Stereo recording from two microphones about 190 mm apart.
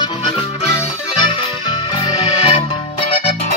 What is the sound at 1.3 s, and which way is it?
Music, 25° left (ahead or behind).